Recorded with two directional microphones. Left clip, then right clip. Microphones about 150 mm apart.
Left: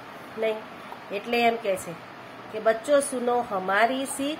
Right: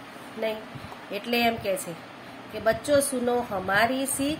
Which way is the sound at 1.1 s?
10° right (ahead or behind).